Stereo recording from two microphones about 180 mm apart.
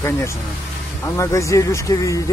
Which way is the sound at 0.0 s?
15° left (ahead or behind).